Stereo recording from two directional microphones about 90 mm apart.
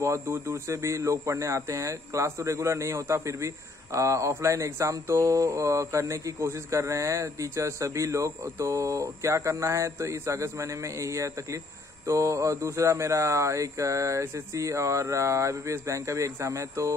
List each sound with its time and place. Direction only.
0.0 s speech: 35° right (ahead or behind)